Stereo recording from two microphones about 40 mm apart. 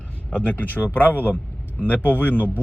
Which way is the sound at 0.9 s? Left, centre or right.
Left.